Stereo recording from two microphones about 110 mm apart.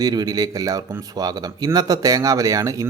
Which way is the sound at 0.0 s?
35° right (ahead or behind).